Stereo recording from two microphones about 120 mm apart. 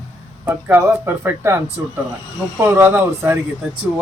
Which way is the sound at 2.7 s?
15° right (ahead or behind).